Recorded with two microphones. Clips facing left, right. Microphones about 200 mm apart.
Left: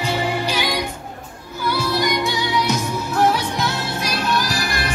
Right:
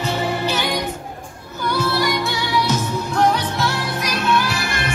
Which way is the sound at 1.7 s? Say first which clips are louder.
Right 1 dB; 15° left (ahead or behind).